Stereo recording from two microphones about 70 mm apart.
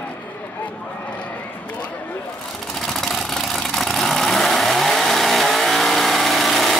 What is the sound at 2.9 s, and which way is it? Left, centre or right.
Vehicle, centre.